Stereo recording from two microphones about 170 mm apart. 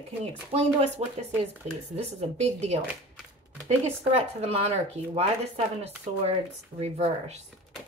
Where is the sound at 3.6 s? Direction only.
40° right (ahead or behind).